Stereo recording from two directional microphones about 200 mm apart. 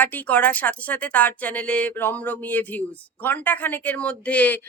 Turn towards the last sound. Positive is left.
turn(degrees=5)  # may be behind; listen again after turning